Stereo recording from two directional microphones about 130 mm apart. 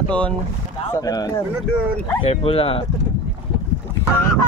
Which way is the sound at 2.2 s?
50° left (ahead or behind).